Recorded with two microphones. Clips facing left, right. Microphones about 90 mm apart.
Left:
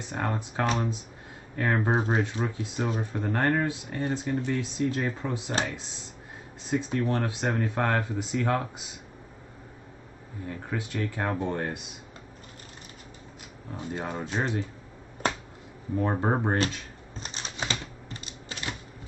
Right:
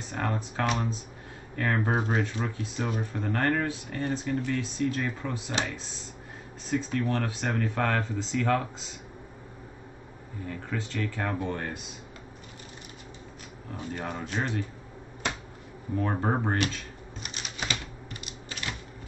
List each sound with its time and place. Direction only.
0.1 s speech: 20° left (ahead or behind)
6.7 s speech: 20° left (ahead or behind)
10.5 s speech: 15° left (ahead or behind)
13.7 s speech: 25° left (ahead or behind)
16.0 s speech: 20° left (ahead or behind)
17.2 s typewriter: 30° left (ahead or behind)